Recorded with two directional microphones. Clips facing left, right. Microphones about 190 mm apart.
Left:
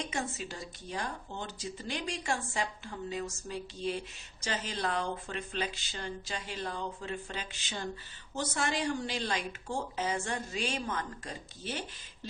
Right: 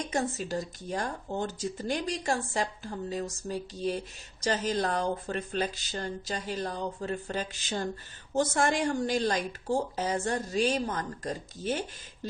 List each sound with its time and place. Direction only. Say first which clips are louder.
0.0 s a woman's voice: right 6 dB; 40° right (ahead or behind)